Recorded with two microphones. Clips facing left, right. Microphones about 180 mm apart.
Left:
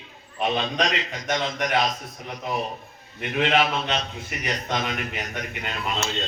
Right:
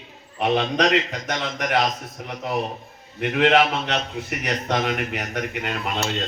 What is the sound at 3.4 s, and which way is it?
A man's voice, 70° right (ahead or behind).